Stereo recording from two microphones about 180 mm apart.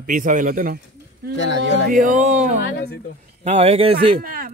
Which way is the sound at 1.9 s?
50° right (ahead or behind).